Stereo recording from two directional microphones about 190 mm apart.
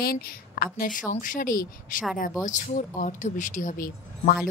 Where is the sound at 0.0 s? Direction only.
55° left (ahead or behind).